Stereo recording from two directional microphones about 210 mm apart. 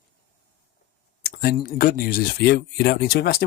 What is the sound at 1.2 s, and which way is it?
Speech, 45° left (ahead or behind).